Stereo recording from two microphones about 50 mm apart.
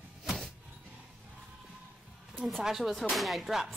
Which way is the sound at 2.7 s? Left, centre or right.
Centre.